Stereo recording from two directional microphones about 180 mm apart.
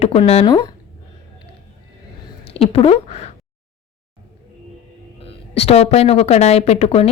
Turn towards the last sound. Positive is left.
turn(degrees=35)  # may be behind; listen again after turning